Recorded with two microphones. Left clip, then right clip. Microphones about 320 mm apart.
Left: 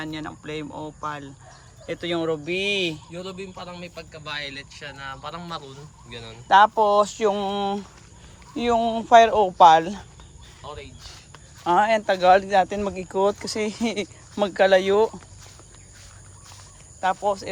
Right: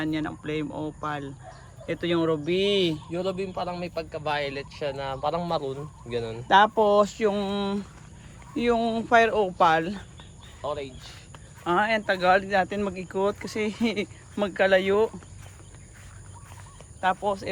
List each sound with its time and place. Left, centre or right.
0.0 s speech: centre
6.5 s speech: centre
10.6 s speech: centre
11.6 s speech: centre
17.0 s speech: centre